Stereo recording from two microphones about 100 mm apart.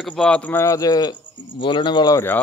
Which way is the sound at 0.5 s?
30° left (ahead or behind).